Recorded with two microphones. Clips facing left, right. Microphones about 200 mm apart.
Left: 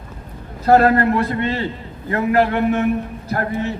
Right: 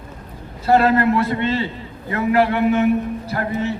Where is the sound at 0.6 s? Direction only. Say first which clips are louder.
Left 2 dB; 50° left (ahead or behind).